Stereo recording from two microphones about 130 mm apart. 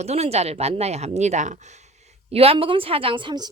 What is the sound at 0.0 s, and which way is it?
A woman's voice, 55° right (ahead or behind).